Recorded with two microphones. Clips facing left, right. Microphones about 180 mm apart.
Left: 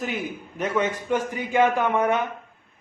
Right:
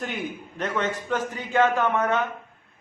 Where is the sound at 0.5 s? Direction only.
10° left (ahead or behind).